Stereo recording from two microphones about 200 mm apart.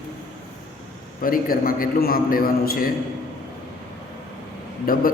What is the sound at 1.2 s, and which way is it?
A man's voice, 45° left (ahead or behind).